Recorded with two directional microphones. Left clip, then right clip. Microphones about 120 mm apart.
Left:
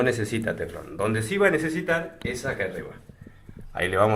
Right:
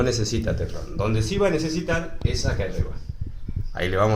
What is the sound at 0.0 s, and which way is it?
Speech, centre (ahead or behind).